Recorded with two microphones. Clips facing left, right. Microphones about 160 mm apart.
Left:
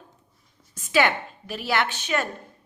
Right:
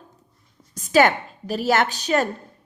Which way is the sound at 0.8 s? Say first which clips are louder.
Right 5 dB; 40° right (ahead or behind).